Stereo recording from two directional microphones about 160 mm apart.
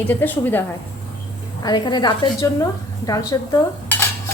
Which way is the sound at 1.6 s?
25° left (ahead or behind).